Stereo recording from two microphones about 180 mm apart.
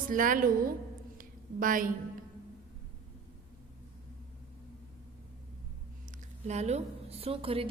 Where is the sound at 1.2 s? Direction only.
50° right (ahead or behind).